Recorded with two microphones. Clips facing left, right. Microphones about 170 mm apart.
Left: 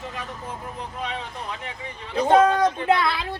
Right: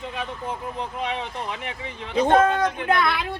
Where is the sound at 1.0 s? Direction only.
15° right (ahead or behind).